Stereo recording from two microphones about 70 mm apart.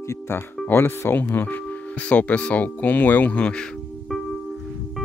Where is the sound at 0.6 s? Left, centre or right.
Left.